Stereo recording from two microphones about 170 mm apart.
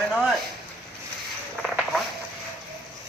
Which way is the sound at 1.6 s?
Centre (ahead or behind).